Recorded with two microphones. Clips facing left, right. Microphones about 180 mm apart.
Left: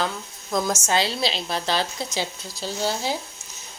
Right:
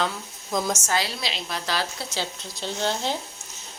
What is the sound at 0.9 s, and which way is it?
A woman's voice, 25° left (ahead or behind).